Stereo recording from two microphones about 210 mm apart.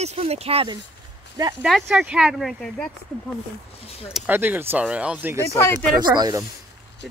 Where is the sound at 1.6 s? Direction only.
Centre (ahead or behind).